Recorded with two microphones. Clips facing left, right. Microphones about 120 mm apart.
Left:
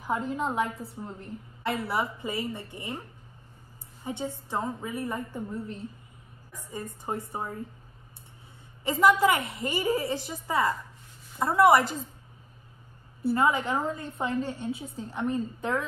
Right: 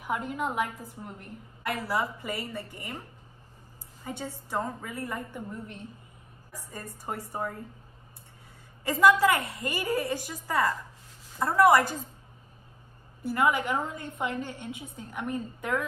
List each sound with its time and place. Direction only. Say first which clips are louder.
0.0 s a woman's voice: left 2 dB; 35° left (ahead or behind)
4.0 s a woman's voice: left 3 dB; 20° left (ahead or behind)
6.5 s a woman's voice: left 4 dB; 20° left (ahead or behind)
8.8 s a woman's voice: even; 25° left (ahead or behind)
13.2 s a woman's voice: left 1 dB; 30° left (ahead or behind)